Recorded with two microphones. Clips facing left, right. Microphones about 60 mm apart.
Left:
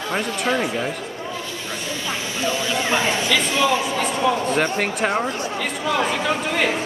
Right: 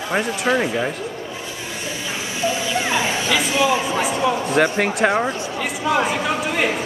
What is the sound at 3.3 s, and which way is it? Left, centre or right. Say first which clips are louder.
Speech: right 2 dB; centre.